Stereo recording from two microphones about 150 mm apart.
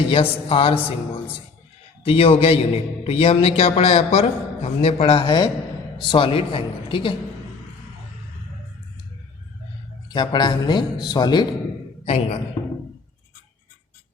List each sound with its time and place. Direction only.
0.1 s a man's voice: 35° left (ahead or behind)
10.1 s speech: 30° left (ahead or behind)
12.0 s a man's voice: 40° left (ahead or behind)